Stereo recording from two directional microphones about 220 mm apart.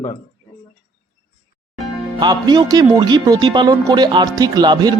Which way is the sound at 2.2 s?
20° right (ahead or behind).